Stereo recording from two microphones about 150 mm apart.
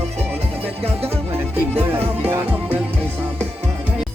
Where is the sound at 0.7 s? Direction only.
40° right (ahead or behind).